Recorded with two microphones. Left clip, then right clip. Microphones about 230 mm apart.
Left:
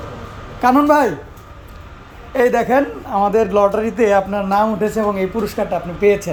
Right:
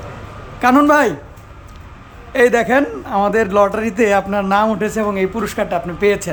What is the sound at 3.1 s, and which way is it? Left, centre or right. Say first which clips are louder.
Speech: even; right.